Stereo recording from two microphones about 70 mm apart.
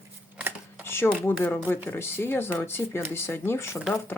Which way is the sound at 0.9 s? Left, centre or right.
Left.